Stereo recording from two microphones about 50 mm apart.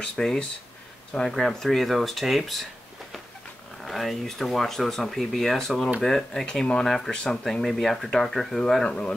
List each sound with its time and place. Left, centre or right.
0.0 s speech: centre
3.8 s speech: centre
8.8 s speech: left